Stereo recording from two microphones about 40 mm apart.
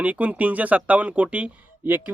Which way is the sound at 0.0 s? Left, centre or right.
Right.